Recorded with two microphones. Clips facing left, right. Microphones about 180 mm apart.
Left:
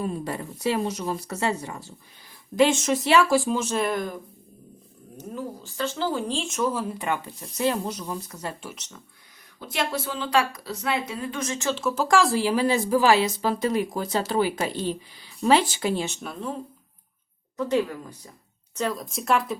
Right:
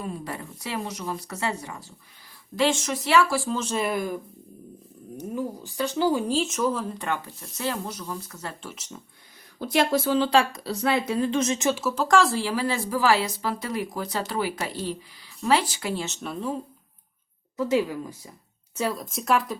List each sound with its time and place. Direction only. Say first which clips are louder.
0.9 s speech: left 4 dB; 30° left (ahead or behind)
3.7 s speech: even; 5° right (ahead or behind); by 8.7 s 15° left (ahead or behind)
9.6 s speech: right 6 dB; 35° right (ahead or behind); by 11.8 s 20° right (ahead or behind)
11.9 s speech: left 2 dB; 5° left (ahead or behind)
16.2 s speech: right 2 dB; centre (ahead or behind)
17.6 s speech: right 1 dB; 5° right (ahead or behind)